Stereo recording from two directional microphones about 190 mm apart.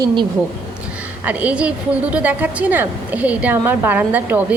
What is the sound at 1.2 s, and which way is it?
A woman's voice, 5° right (ahead or behind).